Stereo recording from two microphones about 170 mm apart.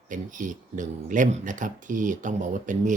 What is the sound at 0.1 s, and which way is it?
Speech, 50° right (ahead or behind).